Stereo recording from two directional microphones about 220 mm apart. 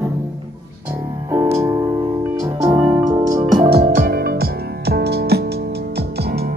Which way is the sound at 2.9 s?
15° right (ahead or behind).